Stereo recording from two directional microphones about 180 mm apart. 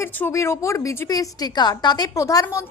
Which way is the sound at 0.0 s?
15° left (ahead or behind).